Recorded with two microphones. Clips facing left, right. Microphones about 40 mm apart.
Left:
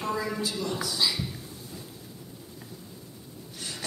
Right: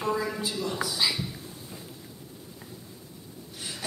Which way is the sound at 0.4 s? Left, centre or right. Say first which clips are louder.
Even; centre.